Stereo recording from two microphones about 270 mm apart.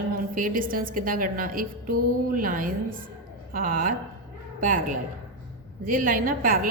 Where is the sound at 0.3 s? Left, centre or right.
Right.